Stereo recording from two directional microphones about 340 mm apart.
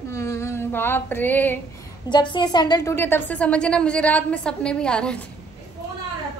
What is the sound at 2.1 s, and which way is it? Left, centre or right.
Speech, centre.